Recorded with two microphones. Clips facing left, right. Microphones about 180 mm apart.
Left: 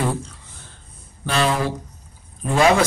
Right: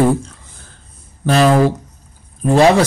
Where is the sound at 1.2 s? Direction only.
45° right (ahead or behind).